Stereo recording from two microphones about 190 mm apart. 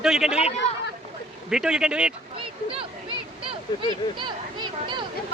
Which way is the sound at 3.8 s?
25° right (ahead or behind).